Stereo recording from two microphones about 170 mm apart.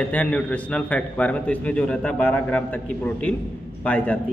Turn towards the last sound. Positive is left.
turn(degrees=10)  # may be behind; listen again after turning